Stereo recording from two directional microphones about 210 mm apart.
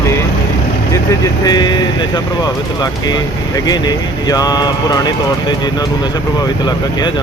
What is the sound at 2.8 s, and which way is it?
Speech, 20° left (ahead or behind).